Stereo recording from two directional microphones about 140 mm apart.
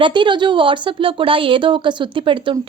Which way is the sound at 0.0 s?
35° right (ahead or behind).